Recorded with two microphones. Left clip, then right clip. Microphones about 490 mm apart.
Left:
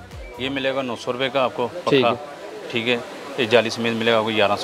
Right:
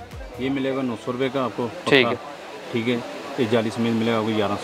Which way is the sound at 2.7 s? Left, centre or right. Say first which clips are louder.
Left 3 dB; left.